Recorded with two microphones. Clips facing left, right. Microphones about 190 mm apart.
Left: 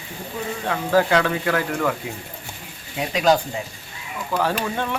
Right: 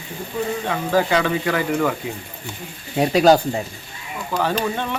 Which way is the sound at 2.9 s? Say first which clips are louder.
Right 5 dB; 40° right (ahead or behind).